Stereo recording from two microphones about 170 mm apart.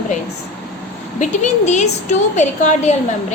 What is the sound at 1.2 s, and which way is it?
A woman's voice, 45° left (ahead or behind).